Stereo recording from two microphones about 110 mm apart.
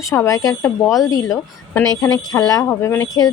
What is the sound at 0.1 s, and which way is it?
A woman's voice, 30° left (ahead or behind).